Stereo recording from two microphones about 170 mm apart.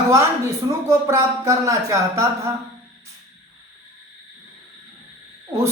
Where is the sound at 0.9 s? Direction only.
20° right (ahead or behind).